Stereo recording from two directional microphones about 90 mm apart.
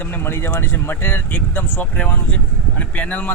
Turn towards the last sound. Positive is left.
turn(degrees=15)  # may be behind; listen again after turning